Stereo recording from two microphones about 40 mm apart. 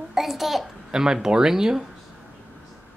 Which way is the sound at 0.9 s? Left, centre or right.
Centre.